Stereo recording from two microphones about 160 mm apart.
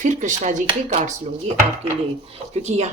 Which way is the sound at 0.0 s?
50° right (ahead or behind).